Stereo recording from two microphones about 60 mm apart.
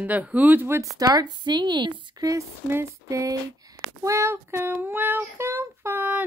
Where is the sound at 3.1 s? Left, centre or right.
Right.